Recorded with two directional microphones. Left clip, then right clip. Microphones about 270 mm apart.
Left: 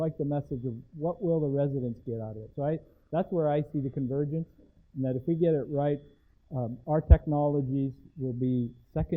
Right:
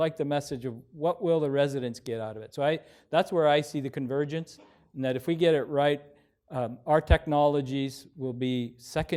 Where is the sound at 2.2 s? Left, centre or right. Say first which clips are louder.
Right 4 dB; centre.